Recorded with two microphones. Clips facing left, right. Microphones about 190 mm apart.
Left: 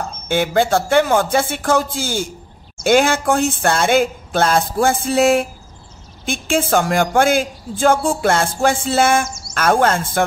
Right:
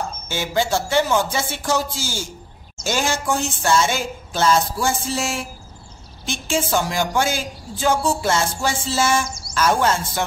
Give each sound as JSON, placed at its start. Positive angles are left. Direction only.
{"t": 0.3, "sound": "speech", "side_deg": 55}